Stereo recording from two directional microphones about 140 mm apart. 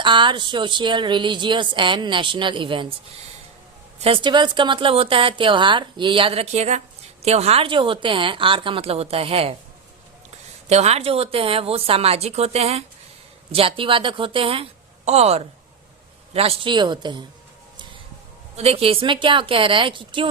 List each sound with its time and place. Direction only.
0.0 s speech: 35° right (ahead or behind)
4.0 s speech: 35° right (ahead or behind)
10.7 s a woman's voice: 50° right (ahead or behind); by 17.2 s 35° right (ahead or behind)
18.5 s speech: 45° right (ahead or behind)